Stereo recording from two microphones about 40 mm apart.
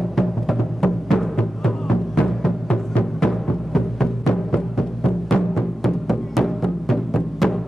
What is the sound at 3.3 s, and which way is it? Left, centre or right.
Music, centre.